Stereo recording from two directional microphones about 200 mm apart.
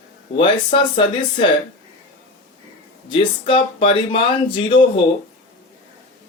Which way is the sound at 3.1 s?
25° left (ahead or behind).